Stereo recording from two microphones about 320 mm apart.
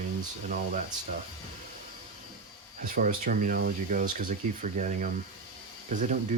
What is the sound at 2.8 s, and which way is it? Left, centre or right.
Speech, right.